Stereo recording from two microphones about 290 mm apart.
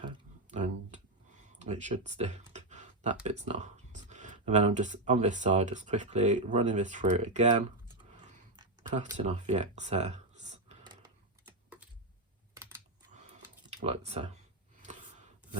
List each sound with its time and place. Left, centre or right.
0.5 s a sound: right
1.5 s computer keyboard: right
3.2 s speech: right
9.1 s speech: right
11.4 s typing: centre
12.5 s computer keyboard: centre
13.8 s speech: right